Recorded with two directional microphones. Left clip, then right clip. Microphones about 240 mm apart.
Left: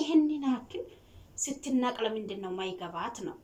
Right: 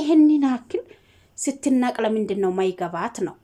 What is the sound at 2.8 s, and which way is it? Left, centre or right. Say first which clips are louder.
Speech: right 10 dB; right.